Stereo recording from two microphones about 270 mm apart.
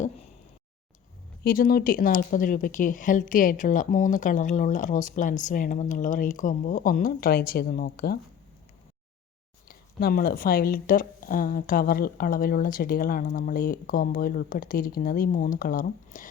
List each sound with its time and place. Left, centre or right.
1.5 s speech: left
9.6 s a woman's voice: left